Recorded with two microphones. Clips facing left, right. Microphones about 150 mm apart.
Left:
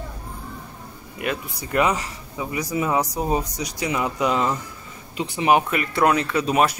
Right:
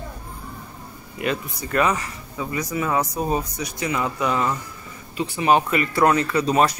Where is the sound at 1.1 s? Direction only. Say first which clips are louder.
Right 2 dB; 5° left (ahead or behind).